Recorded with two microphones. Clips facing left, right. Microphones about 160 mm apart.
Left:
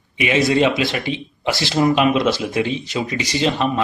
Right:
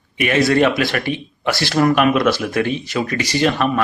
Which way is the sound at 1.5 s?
20° left (ahead or behind).